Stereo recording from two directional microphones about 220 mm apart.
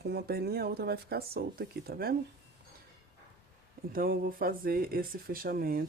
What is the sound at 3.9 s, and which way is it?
Speech, 40° right (ahead or behind).